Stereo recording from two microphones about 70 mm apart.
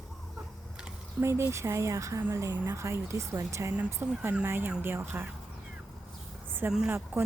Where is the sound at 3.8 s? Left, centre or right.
Right.